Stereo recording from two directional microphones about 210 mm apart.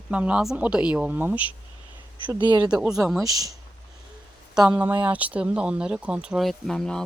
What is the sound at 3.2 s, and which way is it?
Speech, 15° right (ahead or behind).